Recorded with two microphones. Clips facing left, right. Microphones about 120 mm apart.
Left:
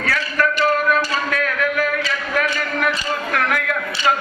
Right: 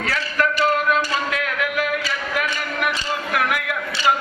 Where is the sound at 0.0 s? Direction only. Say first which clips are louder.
Left 2 dB; 25° right (ahead or behind).